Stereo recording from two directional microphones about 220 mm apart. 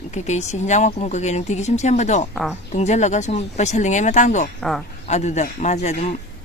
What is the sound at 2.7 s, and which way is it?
Speech, 30° left (ahead or behind).